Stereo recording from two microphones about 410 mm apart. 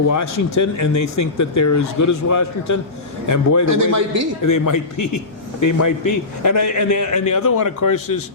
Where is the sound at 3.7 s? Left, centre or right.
Right.